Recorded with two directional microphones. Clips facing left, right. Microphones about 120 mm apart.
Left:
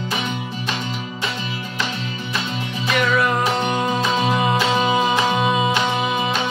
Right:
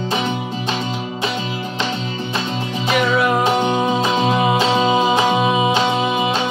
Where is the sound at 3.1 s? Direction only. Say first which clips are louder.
Right 2 dB; 5° right (ahead or behind).